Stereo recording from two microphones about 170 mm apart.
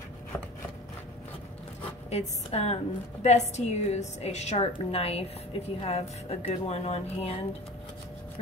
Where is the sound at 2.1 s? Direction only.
40° left (ahead or behind).